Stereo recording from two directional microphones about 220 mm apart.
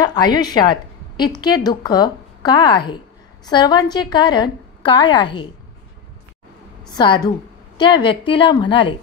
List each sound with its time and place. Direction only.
0.0 s a woman's voice: 20° left (ahead or behind)
6.9 s a woman's voice: 20° left (ahead or behind)